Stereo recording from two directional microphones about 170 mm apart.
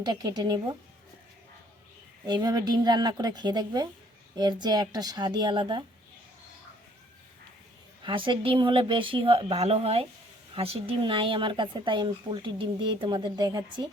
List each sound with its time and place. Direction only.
0.0 s speech: 25° right (ahead or behind)
2.2 s speech: 25° right (ahead or behind)
8.0 s speech: 30° right (ahead or behind)